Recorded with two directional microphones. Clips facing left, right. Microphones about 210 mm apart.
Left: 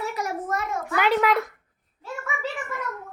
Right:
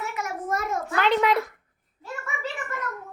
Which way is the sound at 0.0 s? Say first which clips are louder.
Left 3 dB; 35° left (ahead or behind).